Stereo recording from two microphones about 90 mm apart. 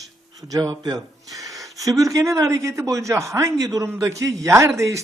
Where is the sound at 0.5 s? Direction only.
50° right (ahead or behind).